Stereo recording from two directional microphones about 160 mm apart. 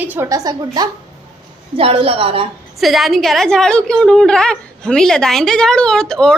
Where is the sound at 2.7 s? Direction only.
Centre (ahead or behind).